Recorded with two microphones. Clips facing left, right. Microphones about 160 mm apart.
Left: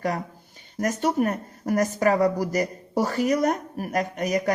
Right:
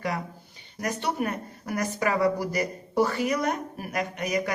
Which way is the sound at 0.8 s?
45° left (ahead or behind).